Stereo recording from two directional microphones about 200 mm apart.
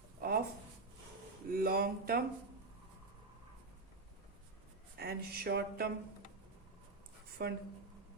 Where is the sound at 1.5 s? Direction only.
45° right (ahead or behind).